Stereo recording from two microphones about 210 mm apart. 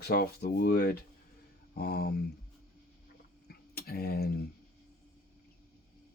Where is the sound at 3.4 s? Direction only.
45° left (ahead or behind).